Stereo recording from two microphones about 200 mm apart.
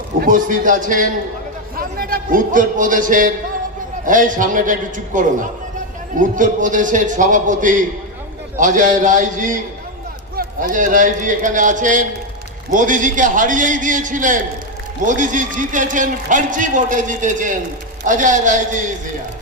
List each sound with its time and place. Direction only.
0.2 s a man's voice: 40° right (ahead or behind)